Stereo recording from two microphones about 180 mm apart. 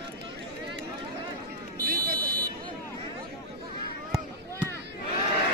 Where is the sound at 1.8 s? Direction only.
55° right (ahead or behind).